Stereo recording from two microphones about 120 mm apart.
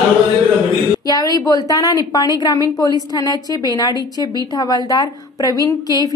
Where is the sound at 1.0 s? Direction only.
30° left (ahead or behind).